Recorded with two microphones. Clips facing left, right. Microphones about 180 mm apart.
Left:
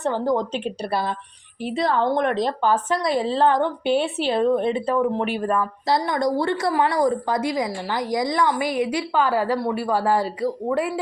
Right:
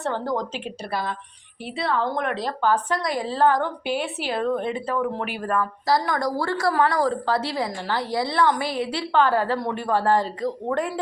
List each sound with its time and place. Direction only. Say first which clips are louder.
0.0 s a woman's voice: left 4 dB; 20° left (ahead or behind)
0.6 s a woman's voice: left 4 dB; 30° left (ahead or behind)
2.6 s a woman's voice: left 1 dB; 20° left (ahead or behind)